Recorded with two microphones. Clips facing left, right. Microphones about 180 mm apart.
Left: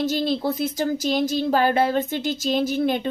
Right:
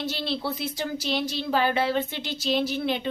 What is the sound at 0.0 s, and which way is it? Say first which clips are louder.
Speech: left 7 dB; 45° left (ahead or behind).